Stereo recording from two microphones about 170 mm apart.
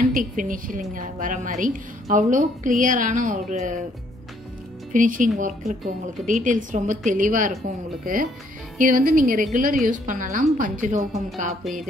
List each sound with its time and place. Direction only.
0.1 s a woman's voice: 50° right (ahead or behind)
4.9 s a woman's voice: 50° right (ahead or behind)